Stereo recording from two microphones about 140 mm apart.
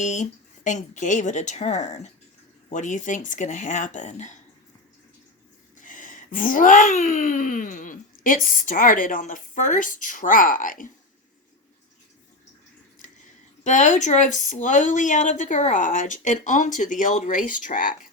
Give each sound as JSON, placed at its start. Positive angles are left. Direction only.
{"t": 0.0, "sound": "speech", "side_deg": 60}
{"t": 5.8, "sound": "a sound", "side_deg": 70}
{"t": 8.4, "sound": "speech", "side_deg": 75}
{"t": 13.7, "sound": "speech", "side_deg": 60}